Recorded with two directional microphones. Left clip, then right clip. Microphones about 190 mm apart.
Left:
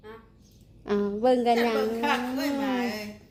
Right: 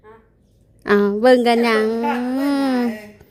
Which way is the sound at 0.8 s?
70° right (ahead or behind).